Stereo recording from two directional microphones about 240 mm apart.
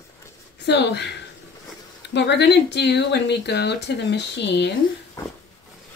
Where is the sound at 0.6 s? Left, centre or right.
Left.